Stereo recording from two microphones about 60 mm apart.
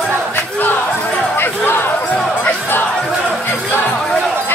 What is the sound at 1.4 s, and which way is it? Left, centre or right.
Chatter, left.